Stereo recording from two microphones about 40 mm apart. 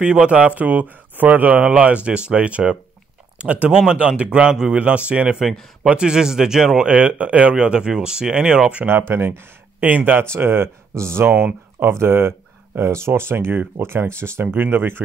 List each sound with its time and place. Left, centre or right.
0.0 s speech: right
1.6 s speech: right
4.7 s speech: right; by 6.8 s centre
6.8 s speech: right
7.5 s speech: right
8.8 s speech: right
9.8 s speech: right
10.3 s speech: right
11.8 s speech: right
14.4 s speech: right